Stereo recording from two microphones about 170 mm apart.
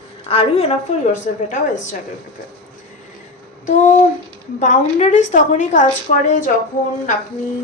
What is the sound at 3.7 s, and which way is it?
A woman's voice, 45° left (ahead or behind).